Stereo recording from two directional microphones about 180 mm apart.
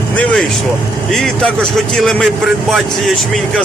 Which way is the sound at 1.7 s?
5° left (ahead or behind).